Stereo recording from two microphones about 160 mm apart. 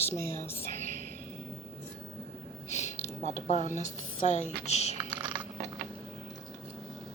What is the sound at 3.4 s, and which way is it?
A woman's voice, 45° left (ahead or behind).